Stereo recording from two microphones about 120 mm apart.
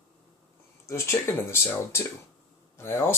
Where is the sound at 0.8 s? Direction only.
25° left (ahead or behind).